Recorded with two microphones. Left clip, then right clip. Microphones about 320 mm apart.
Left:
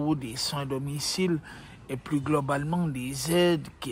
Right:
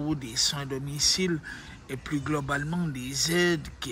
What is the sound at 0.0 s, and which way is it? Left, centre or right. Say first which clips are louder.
Speech: right 1 dB; centre.